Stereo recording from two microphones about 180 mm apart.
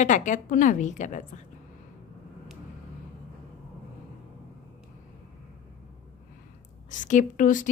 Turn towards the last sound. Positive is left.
turn(degrees=45)  # may be behind; listen again after turning